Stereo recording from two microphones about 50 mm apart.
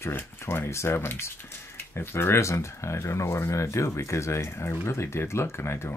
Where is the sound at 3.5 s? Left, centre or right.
Left.